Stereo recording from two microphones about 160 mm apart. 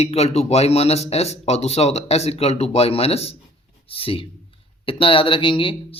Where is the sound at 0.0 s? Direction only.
40° left (ahead or behind).